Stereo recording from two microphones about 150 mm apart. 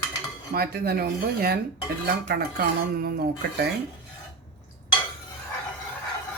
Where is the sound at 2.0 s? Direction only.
90° right.